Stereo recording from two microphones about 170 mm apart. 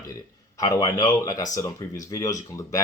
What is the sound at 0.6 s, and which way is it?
Speech, 20° left (ahead or behind).